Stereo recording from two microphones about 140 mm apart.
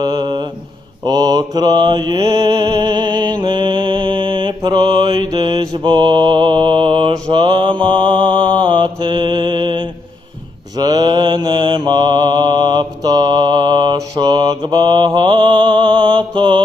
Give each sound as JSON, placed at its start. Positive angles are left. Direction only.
{"t": 0.0, "sound": "mantra", "side_deg": -30}